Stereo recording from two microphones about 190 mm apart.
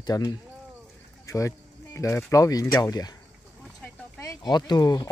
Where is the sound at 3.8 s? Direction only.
15° left (ahead or behind).